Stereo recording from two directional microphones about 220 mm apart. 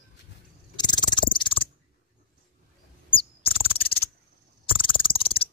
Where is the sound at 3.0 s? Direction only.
25° left (ahead or behind).